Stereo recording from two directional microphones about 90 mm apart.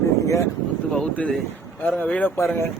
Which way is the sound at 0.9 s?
5° left (ahead or behind).